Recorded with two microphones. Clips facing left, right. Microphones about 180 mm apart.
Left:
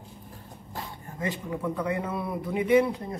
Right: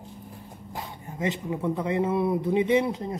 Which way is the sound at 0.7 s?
20° right (ahead or behind).